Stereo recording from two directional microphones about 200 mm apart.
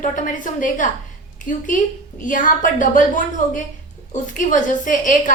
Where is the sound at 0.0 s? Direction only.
40° left (ahead or behind).